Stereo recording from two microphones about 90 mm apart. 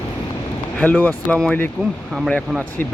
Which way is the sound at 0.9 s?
20° left (ahead or behind).